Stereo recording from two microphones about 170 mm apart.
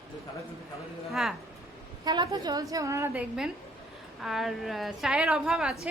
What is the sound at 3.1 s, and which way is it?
A woman's voice, 5° right (ahead or behind).